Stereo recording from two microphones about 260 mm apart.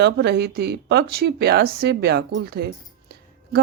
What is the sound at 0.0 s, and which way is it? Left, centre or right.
A woman's voice, right.